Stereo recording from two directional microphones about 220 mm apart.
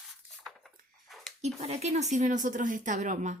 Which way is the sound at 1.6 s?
30° right (ahead or behind).